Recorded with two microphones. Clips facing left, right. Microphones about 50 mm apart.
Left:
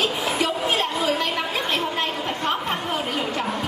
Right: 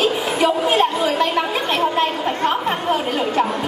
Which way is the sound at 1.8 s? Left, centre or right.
Right.